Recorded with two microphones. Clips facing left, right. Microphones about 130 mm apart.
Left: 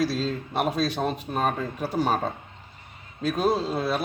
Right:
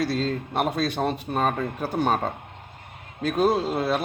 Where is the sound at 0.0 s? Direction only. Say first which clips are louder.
Right 1 dB; centre (ahead or behind).